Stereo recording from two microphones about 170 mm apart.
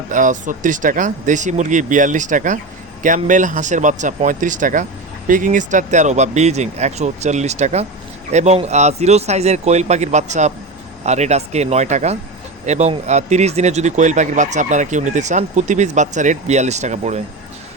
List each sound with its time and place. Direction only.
0.1 s speech: 50° right (ahead or behind)